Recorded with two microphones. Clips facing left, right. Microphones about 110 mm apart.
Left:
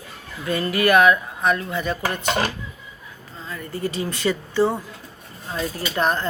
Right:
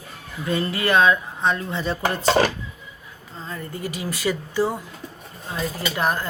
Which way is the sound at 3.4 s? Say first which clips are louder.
Right 1 dB; 35° right (ahead or behind).